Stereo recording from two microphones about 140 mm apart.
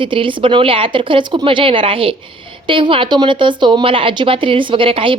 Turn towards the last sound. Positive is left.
turn(degrees=-40)  # may be behind; listen again after turning